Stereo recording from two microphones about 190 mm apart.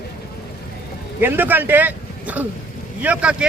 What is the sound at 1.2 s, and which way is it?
A man's voice, 10° right (ahead or behind).